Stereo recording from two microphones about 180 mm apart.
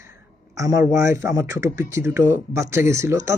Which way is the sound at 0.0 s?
15° right (ahead or behind).